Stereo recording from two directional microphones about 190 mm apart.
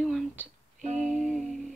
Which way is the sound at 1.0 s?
Centre (ahead or behind).